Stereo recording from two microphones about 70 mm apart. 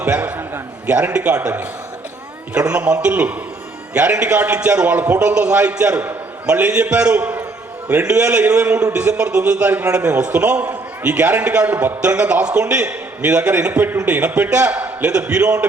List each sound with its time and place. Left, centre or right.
0.0 s a man's voice: right